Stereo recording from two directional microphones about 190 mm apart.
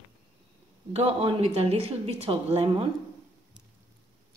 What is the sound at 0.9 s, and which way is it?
A woman's voice, 35° right (ahead or behind).